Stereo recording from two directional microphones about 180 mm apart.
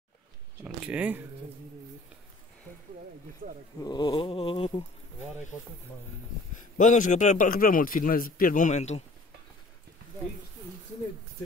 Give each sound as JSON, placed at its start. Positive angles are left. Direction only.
{"t": 0.6, "sound": "speech", "side_deg": -10}
{"t": 3.8, "sound": "a sound", "side_deg": 25}
{"t": 6.6, "sound": "a man's voice", "side_deg": 45}